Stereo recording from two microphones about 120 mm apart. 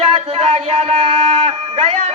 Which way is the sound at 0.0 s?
55° right (ahead or behind).